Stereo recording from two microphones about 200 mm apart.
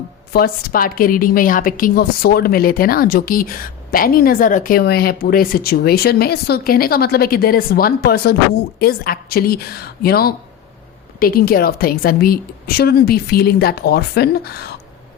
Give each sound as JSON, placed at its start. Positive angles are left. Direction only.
{"t": 0.3, "sound": "a woman's voice", "side_deg": 45}